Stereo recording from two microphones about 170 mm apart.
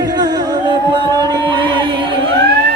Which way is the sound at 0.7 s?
25° right (ahead or behind).